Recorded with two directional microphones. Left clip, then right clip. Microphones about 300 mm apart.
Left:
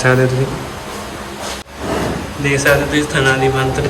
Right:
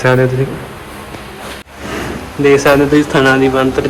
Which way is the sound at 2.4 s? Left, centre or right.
Centre.